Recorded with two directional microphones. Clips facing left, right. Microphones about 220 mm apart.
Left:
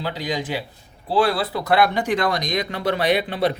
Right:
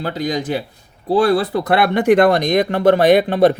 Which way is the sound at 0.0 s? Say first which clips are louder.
Right 5 dB; 45° right (ahead or behind).